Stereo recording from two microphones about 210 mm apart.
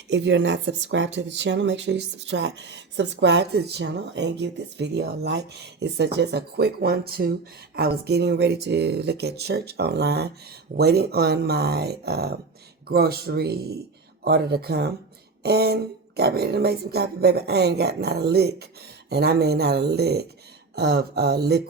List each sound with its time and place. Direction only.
0.1 s speech: 55° right (ahead or behind)